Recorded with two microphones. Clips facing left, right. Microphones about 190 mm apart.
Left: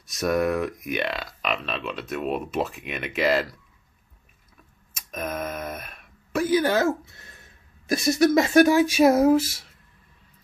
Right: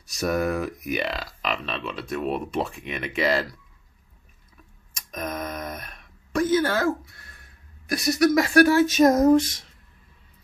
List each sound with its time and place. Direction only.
0.0 s speech: centre (ahead or behind)
4.9 s speech: 5° left (ahead or behind)